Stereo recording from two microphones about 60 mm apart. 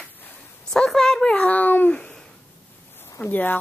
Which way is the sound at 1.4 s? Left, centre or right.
Left.